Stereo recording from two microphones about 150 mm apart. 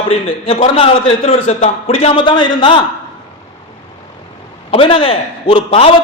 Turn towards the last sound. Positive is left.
turn(degrees=40)  # may be behind; listen again after turning